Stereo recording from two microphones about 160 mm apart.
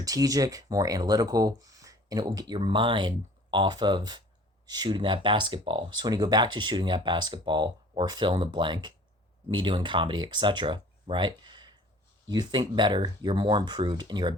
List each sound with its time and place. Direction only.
0.0 s speech: 20° right (ahead or behind)